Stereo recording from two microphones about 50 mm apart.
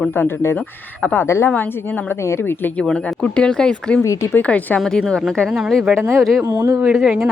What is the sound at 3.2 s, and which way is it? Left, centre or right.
Speech, left.